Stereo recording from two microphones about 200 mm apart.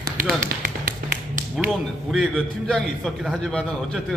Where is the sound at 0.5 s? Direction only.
50° right (ahead or behind).